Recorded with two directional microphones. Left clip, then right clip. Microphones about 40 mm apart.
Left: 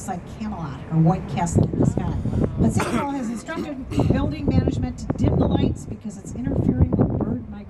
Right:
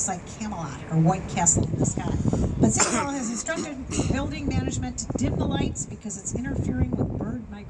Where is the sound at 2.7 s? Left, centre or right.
Centre.